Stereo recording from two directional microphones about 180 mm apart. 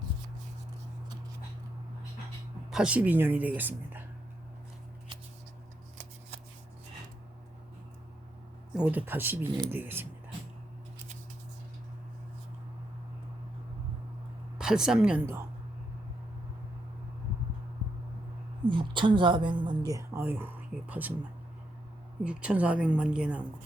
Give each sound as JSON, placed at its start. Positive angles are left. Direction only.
{"t": 2.6, "sound": "a woman's voice", "side_deg": -5}
{"t": 8.7, "sound": "a woman's voice", "side_deg": -10}
{"t": 14.6, "sound": "speech", "side_deg": -5}
{"t": 18.7, "sound": "speech", "side_deg": -25}
{"t": 22.2, "sound": "a woman's voice", "side_deg": -5}